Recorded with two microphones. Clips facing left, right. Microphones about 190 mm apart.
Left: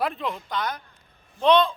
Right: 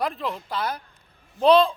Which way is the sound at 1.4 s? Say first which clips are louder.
Right 2 dB; 35° right (ahead or behind).